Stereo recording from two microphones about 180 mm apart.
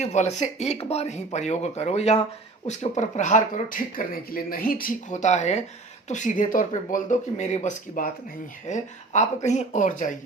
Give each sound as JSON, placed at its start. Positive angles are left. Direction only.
{"t": 0.0, "sound": "speech", "side_deg": 40}